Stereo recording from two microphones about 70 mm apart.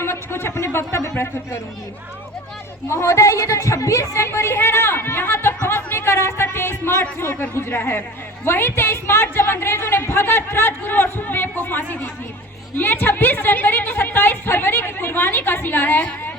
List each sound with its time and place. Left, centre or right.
0.0 s speech: left
2.9 s a woman's voice: left
4.2 s a woman's voice: left